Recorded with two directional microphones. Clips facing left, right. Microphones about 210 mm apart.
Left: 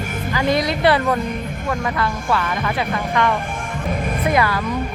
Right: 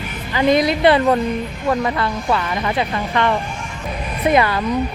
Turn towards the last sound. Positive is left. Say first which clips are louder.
# right 3 dB
turn(degrees=-25)  # may be behind; listen again after turning